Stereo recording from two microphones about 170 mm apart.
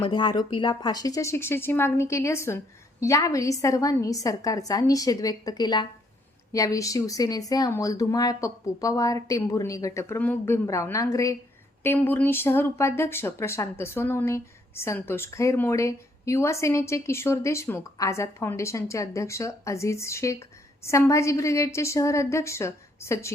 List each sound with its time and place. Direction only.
0.0 s speech: 25° left (ahead or behind)